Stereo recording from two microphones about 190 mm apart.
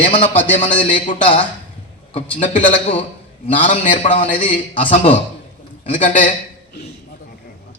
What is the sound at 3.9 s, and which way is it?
Speech, 30° left (ahead or behind).